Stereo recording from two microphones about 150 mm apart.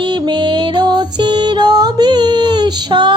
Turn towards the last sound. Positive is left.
turn(degrees=-30)  # may be behind; listen again after turning